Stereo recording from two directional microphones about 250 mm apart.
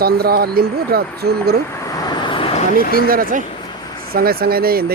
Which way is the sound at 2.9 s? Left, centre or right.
Right.